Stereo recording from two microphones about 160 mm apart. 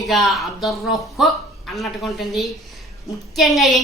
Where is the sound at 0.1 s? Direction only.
Centre (ahead or behind).